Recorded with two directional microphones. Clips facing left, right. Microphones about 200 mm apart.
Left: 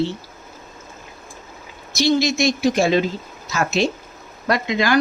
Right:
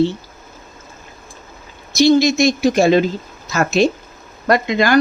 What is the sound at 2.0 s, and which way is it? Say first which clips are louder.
Speech: right 5 dB; 45° right (ahead or behind).